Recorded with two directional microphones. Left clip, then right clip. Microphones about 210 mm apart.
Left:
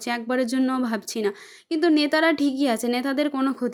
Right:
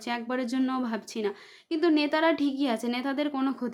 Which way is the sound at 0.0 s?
20° left (ahead or behind).